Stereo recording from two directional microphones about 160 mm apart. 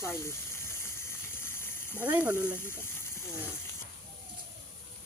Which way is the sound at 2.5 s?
15° left (ahead or behind).